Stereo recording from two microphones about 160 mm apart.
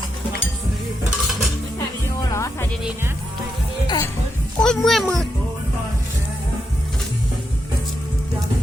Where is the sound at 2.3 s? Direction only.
20° left (ahead or behind).